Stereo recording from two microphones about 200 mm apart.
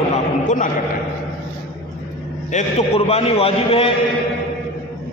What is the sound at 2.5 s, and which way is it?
A man's voice, 35° left (ahead or behind).